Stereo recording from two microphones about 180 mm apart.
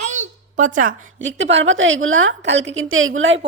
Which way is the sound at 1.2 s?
90° right.